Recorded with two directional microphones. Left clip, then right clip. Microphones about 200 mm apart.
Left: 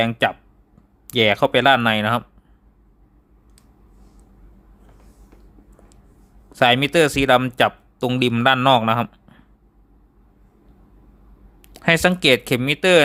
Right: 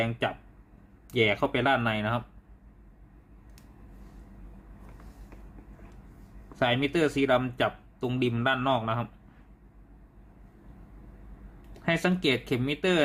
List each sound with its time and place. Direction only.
0.0 s speech: 50° left (ahead or behind)
6.5 s speech: 55° left (ahead or behind)
11.7 s speech: 50° left (ahead or behind)